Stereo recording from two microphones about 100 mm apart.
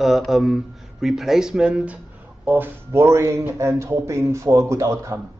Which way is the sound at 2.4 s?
20° right (ahead or behind).